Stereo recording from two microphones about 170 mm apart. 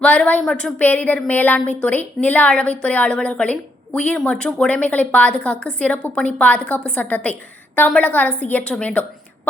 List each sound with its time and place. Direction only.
0.0 s a woman's voice: 5° left (ahead or behind)